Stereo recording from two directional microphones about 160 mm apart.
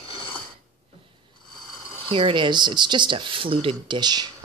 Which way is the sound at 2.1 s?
35° right (ahead or behind).